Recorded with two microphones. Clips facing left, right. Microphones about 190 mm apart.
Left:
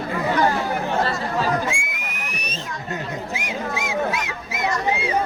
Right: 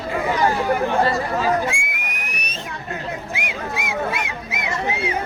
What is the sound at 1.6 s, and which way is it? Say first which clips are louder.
Whistle: right 1 dB; 60° right (ahead or behind).